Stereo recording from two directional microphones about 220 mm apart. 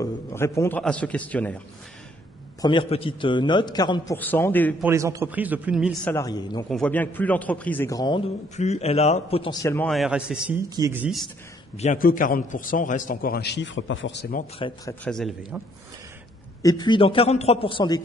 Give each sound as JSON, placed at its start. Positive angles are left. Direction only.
{"t": 0.0, "sound": "a man's voice", "side_deg": 10}
{"t": 2.6, "sound": "a man's voice", "side_deg": 20}
{"t": 4.8, "sound": "a man's voice", "side_deg": -15}
{"t": 6.1, "sound": "a man's voice", "side_deg": 15}
{"t": 6.7, "sound": "a man's voice", "side_deg": 5}
{"t": 8.5, "sound": "a man's voice", "side_deg": 30}
{"t": 11.7, "sound": "a man's voice", "side_deg": 35}
{"t": 14.6, "sound": "a man's voice", "side_deg": 25}
{"t": 15.0, "sound": "a man's voice", "side_deg": 0}
{"t": 16.6, "sound": "a man's voice", "side_deg": 20}